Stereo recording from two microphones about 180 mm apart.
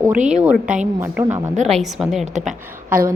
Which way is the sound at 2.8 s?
50° right (ahead or behind).